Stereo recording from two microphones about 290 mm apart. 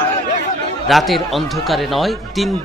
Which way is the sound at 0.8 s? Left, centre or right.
Centre.